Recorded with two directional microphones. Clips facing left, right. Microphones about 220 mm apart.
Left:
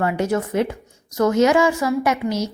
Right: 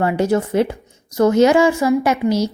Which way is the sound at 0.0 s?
30° right (ahead or behind).